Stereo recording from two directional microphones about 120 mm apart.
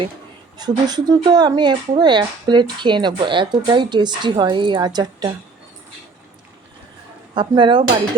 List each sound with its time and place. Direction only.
0.5 s a woman's voice: 35° right (ahead or behind)
7.3 s speech: 45° right (ahead or behind)